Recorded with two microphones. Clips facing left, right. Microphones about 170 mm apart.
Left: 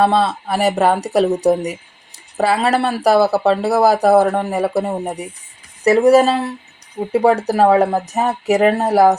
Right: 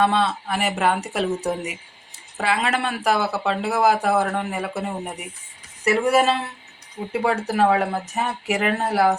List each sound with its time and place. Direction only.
0.0 s speech: 35° left (ahead or behind)